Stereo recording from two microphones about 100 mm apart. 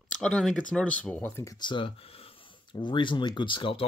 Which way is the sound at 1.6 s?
55° left (ahead or behind).